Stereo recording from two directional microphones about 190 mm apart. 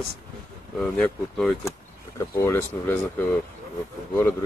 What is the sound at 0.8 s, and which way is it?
Speech, 5° left (ahead or behind).